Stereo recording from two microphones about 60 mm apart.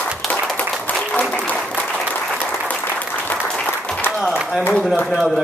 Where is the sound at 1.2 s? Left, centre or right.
Left.